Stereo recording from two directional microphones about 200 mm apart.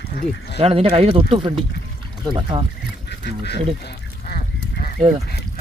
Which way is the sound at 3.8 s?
45° left (ahead or behind).